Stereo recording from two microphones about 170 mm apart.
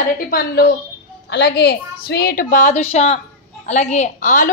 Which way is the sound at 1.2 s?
85° left.